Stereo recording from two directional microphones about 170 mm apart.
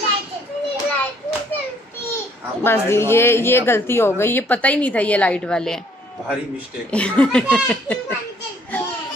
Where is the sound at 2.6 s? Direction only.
15° left (ahead or behind).